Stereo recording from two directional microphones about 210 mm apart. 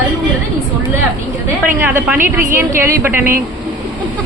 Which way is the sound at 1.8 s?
10° right (ahead or behind).